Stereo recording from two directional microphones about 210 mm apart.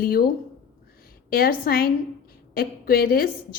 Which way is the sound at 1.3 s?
45° left (ahead or behind).